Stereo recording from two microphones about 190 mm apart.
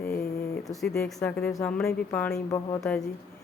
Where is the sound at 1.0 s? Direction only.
5° left (ahead or behind).